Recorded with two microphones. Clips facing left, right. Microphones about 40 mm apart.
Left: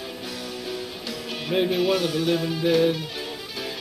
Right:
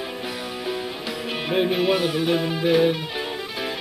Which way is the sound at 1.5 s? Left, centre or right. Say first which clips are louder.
Right 1 dB; centre.